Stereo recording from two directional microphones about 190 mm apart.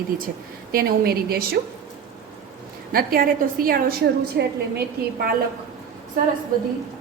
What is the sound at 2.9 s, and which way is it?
A woman's voice, 50° right (ahead or behind).